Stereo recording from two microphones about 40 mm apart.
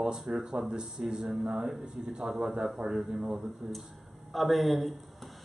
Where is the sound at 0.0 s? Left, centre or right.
Centre.